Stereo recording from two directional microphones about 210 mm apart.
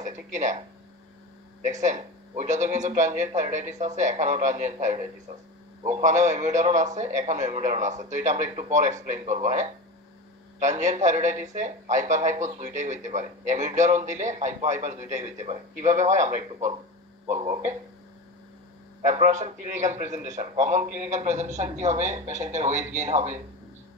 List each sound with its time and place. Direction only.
0.0 s speech: 35° right (ahead or behind)
19.0 s speech: 35° right (ahead or behind)